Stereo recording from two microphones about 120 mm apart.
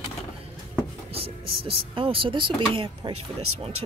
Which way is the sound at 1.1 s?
50° right (ahead or behind).